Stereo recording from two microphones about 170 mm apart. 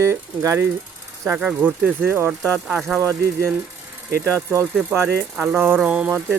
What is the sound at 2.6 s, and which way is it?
Speech, 5° right (ahead or behind).